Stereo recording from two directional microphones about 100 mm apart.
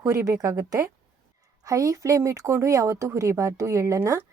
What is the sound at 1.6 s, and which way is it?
A woman's voice, 35° right (ahead or behind).